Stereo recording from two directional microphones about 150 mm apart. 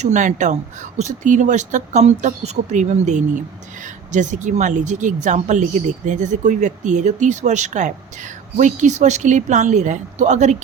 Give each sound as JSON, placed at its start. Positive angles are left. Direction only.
{"t": 0.0, "sound": "speech", "side_deg": -55}